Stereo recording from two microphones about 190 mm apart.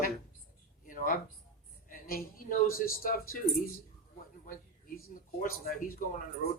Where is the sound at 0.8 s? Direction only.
45° left (ahead or behind).